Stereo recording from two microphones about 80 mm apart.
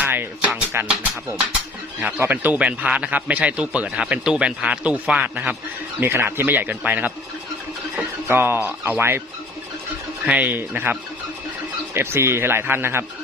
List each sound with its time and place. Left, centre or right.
0.0 s music: right
2.0 s a man's voice: centre
10.2 s speech: centre
11.9 s speech: right